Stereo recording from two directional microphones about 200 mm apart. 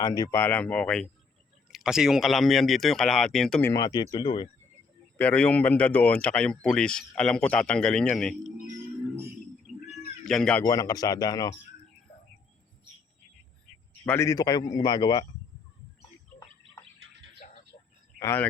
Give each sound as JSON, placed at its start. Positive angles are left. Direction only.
{"t": 0.0, "sound": "a man's voice", "side_deg": 15}
{"t": 5.1, "sound": "speech", "side_deg": 5}
{"t": 10.2, "sound": "speech", "side_deg": 5}
{"t": 10.6, "sound": "a man's voice", "side_deg": 20}
{"t": 14.0, "sound": "a man's voice", "side_deg": 10}
{"t": 17.4, "sound": "a sound", "side_deg": 35}
{"t": 18.2, "sound": "speech", "side_deg": 15}